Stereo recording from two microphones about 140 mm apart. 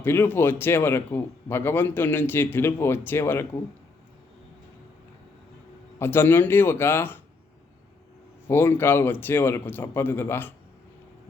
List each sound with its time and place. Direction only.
0.0 s speech: 15° left (ahead or behind)
6.0 s speech: 15° left (ahead or behind)
8.4 s speech: 15° left (ahead or behind)